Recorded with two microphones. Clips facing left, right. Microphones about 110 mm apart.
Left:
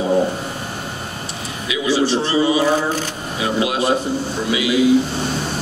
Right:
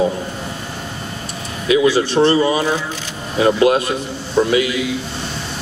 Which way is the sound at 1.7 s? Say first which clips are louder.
Right 4 dB; 50° right (ahead or behind).